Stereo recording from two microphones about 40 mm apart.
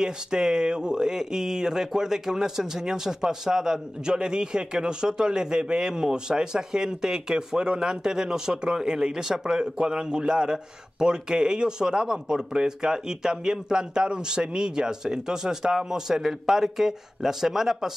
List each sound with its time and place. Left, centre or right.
0.0 s speech: centre